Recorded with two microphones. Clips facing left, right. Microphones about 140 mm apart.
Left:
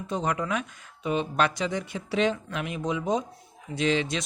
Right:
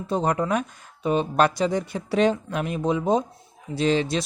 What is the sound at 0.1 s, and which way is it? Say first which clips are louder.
Speech: right 5 dB; 35° right (ahead or behind).